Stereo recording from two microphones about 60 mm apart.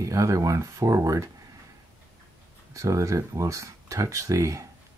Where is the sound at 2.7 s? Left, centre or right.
Right.